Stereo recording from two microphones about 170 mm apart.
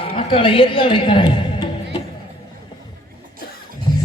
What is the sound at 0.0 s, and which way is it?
A woman's voice, 35° left (ahead or behind).